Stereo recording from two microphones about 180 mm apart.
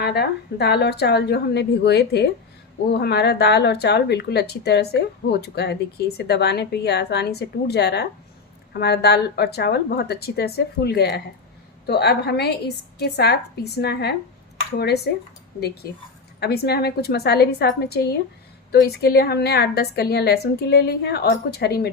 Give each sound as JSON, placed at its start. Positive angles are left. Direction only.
{"t": 0.0, "sound": "speech", "side_deg": 65}